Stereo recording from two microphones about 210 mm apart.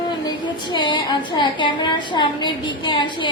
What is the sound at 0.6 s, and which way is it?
A woman's voice, 20° left (ahead or behind).